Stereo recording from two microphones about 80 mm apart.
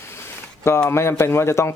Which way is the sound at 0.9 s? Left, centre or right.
Left.